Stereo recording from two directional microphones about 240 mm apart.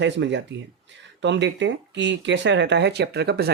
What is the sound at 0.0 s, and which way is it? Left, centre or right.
Speech, right.